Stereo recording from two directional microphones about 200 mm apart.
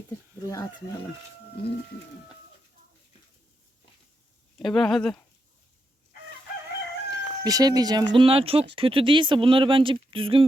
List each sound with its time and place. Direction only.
0.4 s speech: 15° left (ahead or behind)
4.5 s speech: centre (ahead or behind)
7.1 s speech: 20° right (ahead or behind)